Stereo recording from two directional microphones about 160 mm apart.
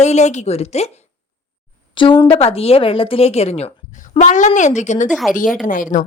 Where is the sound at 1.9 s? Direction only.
30° left (ahead or behind); by 5.1 s 50° left (ahead or behind).